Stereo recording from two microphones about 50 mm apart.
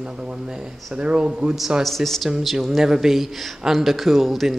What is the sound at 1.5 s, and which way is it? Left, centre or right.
Speech, centre.